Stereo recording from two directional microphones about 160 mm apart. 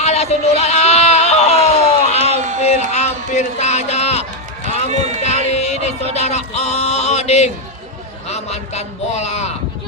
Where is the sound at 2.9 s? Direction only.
45° left (ahead or behind).